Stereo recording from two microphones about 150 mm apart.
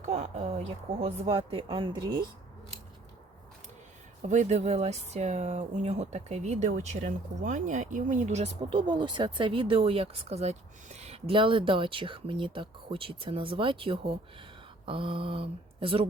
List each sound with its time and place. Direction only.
0.0 s speech: 50° right (ahead or behind); by 2.2 s 30° right (ahead or behind)
4.2 s speech: 55° right (ahead or behind)
8.9 s speech: 30° right (ahead or behind)